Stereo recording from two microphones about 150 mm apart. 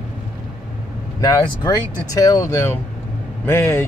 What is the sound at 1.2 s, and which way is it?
Speech, 25° left (ahead or behind).